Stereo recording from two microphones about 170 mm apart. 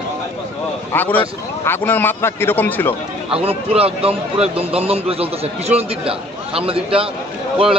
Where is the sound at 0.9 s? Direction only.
10° left (ahead or behind).